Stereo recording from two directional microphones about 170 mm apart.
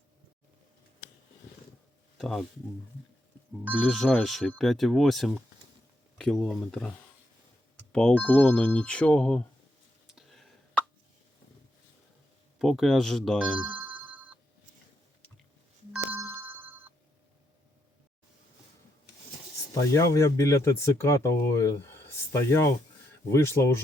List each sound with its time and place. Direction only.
2.1 s speech: centre (ahead or behind)
3.6 s speech: 10° right (ahead or behind)
3.8 s speech: 5° left (ahead or behind)
10.1 s a sound: centre (ahead or behind)
12.5 s speech: centre (ahead or behind)
15.9 s ringtone: 5° right (ahead or behind)
19.7 s speech: 20° left (ahead or behind)